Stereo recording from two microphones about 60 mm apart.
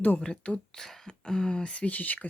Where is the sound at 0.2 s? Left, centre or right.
Centre.